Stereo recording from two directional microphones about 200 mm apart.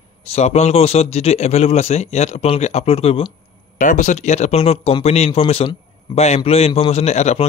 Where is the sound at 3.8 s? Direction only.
40° left (ahead or behind).